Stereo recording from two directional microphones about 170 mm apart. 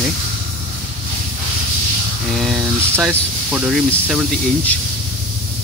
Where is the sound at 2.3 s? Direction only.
Centre (ahead or behind).